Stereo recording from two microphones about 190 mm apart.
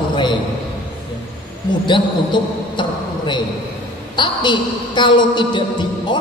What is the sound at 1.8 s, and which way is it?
A man's voice, 25° left (ahead or behind).